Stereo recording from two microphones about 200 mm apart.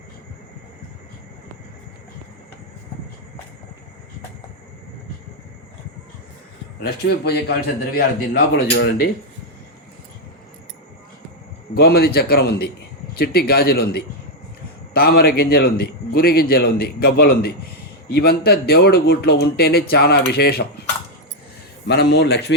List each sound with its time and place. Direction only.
6.8 s a man's voice: 55° left (ahead or behind)
11.7 s a man's voice: 50° left (ahead or behind)
21.8 s a man's voice: 55° left (ahead or behind)